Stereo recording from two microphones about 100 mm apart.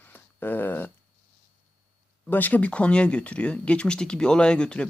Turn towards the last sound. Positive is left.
turn(degrees=10)  # may be behind; listen again after turning